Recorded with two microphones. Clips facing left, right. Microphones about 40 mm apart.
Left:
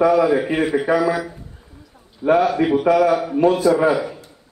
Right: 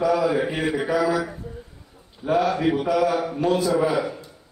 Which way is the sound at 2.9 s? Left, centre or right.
Left.